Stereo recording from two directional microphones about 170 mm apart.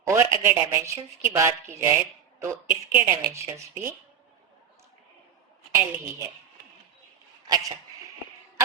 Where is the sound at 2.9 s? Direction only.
15° right (ahead or behind).